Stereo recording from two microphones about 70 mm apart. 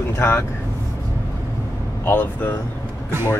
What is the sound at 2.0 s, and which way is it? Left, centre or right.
Speech, left.